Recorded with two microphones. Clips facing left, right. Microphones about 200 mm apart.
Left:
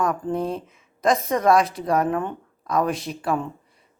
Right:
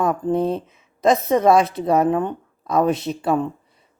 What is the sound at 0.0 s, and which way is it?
Speech, 25° right (ahead or behind).